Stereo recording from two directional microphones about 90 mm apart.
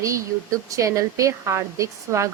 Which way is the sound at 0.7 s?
35° right (ahead or behind).